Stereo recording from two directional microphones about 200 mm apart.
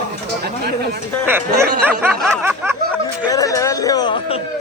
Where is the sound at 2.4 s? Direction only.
10° right (ahead or behind).